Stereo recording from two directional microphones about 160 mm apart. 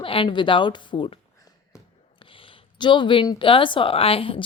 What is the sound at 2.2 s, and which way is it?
Speech, 35° left (ahead or behind).